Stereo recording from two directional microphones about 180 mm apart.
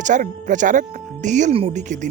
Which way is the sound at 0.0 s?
45° right (ahead or behind).